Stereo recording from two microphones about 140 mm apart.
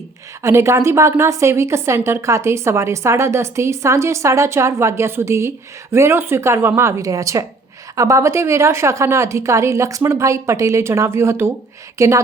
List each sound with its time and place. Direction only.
0.4 s a woman's voice: 20° right (ahead or behind)